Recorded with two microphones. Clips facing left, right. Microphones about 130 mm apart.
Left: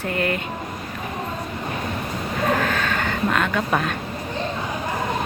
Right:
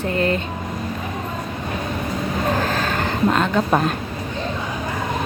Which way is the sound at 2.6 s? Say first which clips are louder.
Right 1 dB; 35° right (ahead or behind).